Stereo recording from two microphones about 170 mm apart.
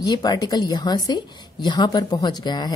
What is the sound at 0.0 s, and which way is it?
A woman's voice, 25° left (ahead or behind).